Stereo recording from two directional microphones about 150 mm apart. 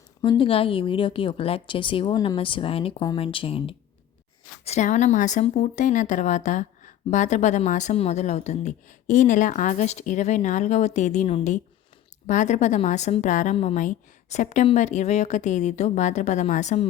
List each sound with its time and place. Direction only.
0.2 s speech: 35° left (ahead or behind)
4.6 s speech: 50° left (ahead or behind)